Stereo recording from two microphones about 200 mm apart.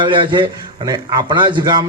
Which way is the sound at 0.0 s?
25° right (ahead or behind).